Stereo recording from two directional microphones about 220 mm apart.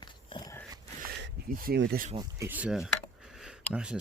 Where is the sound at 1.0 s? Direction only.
45° right (ahead or behind).